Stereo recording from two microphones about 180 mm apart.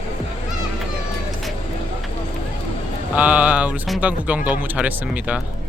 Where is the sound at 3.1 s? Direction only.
5° right (ahead or behind).